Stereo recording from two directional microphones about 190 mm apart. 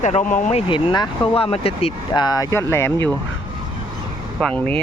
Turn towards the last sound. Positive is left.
turn(degrees=5)  # may be behind; listen again after turning